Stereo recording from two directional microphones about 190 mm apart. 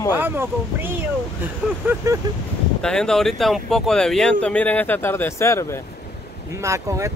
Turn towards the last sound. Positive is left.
turn(degrees=-15)  # may be behind; listen again after turning